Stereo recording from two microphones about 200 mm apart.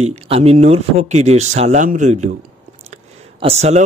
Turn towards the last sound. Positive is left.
turn(degrees=-35)  # may be behind; listen again after turning